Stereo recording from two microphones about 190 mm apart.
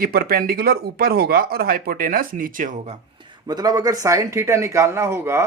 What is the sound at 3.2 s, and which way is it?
Speech, 25° right (ahead or behind).